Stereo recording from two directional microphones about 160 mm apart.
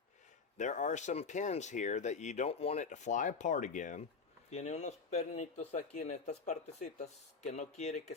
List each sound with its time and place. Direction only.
0.5 s speech: 50° left (ahead or behind)